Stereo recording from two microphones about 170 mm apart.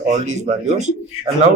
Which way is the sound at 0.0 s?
45° right (ahead or behind).